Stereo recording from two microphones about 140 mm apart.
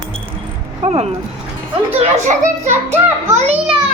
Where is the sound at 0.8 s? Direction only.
45° right (ahead or behind).